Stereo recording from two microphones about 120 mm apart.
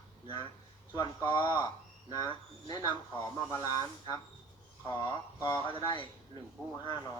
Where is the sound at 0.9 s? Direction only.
25° left (ahead or behind).